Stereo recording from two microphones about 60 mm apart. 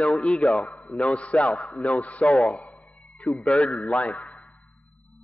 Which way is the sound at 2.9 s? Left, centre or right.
Left.